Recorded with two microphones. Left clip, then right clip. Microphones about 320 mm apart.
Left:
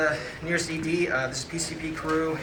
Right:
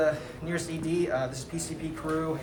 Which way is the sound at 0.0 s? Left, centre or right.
Centre.